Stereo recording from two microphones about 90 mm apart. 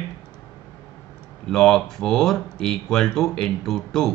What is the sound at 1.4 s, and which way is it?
Speech, 5° left (ahead or behind).